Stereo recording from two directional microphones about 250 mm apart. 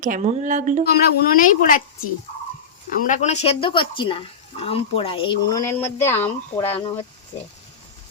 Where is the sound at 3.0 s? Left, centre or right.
Left; by 6.7 s centre.